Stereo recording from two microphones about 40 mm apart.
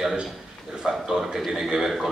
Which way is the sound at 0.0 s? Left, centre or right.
Centre.